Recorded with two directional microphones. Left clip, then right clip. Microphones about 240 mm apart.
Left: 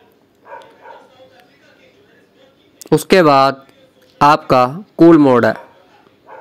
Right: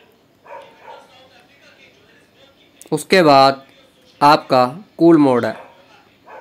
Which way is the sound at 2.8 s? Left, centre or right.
Left.